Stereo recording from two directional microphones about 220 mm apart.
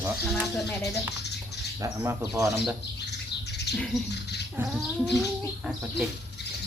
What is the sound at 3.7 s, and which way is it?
Speech, centre (ahead or behind).